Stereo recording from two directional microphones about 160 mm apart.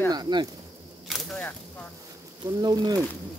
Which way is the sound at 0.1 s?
25° right (ahead or behind).